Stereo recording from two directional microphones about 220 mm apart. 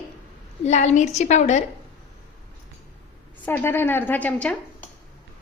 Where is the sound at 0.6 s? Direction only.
30° left (ahead or behind).